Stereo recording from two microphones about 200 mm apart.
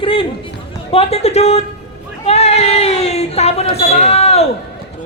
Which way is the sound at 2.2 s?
30° left (ahead or behind).